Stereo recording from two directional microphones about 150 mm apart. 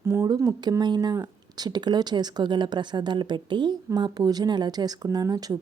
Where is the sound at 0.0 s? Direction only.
15° right (ahead or behind).